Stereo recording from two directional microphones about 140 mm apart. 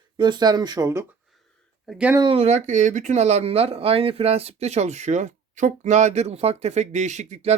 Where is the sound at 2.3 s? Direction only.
50° right (ahead or behind).